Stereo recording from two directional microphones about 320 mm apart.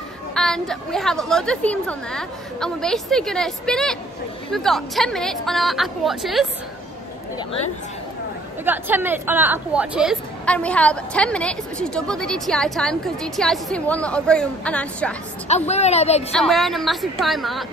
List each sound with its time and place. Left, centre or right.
0.3 s a woman's voice: centre
8.6 s a woman's voice: centre
15.4 s a woman's voice: centre
16.3 s a woman's voice: centre